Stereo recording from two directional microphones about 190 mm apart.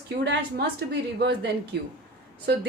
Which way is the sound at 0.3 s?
60° right (ahead or behind).